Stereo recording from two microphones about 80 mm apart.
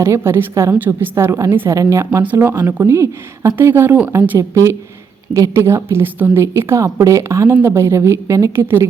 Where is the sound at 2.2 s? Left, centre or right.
Right.